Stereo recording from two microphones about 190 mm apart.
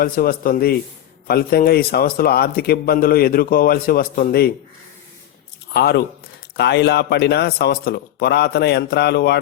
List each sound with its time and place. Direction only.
0.0 s a man's voice: 50° left (ahead or behind)
5.7 s speech: 60° left (ahead or behind)